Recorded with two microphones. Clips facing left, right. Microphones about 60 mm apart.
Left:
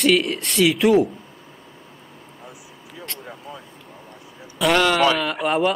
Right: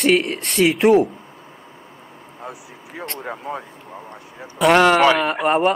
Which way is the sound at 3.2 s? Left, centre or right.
Right.